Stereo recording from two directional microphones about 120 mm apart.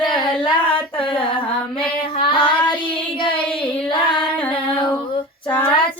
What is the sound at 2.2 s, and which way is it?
Child singing, 45° left (ahead or behind).